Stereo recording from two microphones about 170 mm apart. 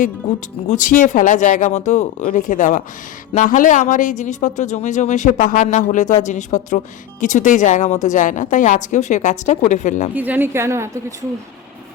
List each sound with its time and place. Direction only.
0.7 s speech: 50° left (ahead or behind)
10.2 s a woman's voice: 10° right (ahead or behind)